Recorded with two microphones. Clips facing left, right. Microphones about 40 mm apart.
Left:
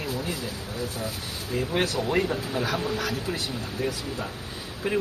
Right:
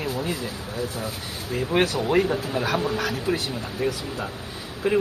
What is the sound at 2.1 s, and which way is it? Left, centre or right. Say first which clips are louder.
Speech: right 4 dB; centre.